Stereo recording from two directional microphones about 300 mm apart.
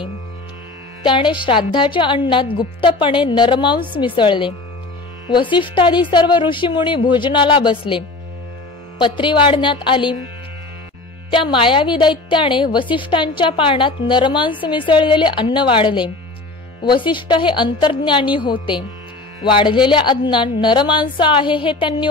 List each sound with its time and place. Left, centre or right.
1.0 s a woman's voice: centre
11.2 s a woman's voice: centre